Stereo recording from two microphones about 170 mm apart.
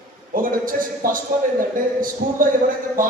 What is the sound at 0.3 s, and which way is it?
Speech, 55° right (ahead or behind).